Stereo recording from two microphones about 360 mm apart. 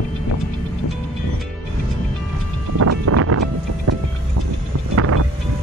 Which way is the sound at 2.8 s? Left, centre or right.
Right.